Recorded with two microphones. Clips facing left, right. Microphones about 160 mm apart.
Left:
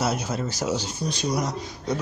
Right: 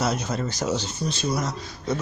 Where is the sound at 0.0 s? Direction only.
10° left (ahead or behind).